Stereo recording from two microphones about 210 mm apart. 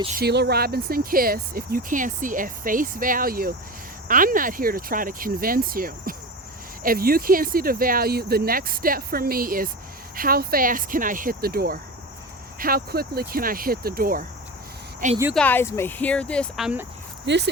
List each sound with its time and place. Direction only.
0.2 s speech: 50° right (ahead or behind)
15.4 s speech: 10° left (ahead or behind)
17.2 s speech: 55° right (ahead or behind)